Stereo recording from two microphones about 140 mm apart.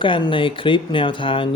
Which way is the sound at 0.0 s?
35° left (ahead or behind).